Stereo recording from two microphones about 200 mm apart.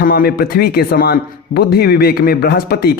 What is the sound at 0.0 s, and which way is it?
A man's voice, 50° left (ahead or behind).